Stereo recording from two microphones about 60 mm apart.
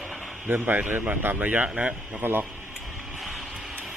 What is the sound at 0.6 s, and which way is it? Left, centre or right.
Speech, right.